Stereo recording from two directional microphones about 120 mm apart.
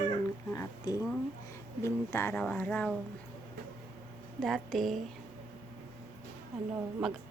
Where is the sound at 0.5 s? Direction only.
30° left (ahead or behind).